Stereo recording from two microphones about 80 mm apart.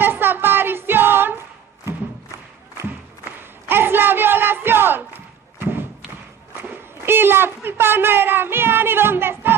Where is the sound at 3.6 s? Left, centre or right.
Right.